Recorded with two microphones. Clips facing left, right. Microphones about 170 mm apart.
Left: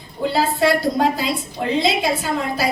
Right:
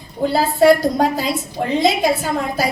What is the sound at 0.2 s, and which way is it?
A woman's voice, 40° right (ahead or behind).